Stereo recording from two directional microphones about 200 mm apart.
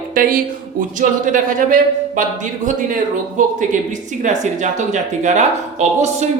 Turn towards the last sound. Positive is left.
turn(degrees=-35)  # may be behind; listen again after turning